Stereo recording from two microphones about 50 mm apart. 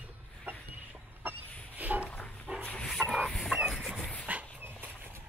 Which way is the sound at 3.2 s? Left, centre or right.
Centre.